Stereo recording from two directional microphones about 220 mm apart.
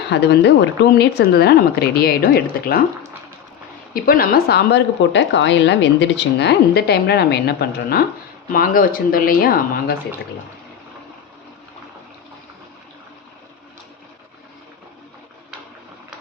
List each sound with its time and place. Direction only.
0.1 s a woman's voice: 50° left (ahead or behind)
3.9 s a woman's voice: 40° left (ahead or behind)